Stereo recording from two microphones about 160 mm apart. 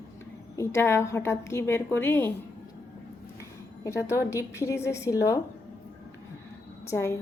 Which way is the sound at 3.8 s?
20° left (ahead or behind).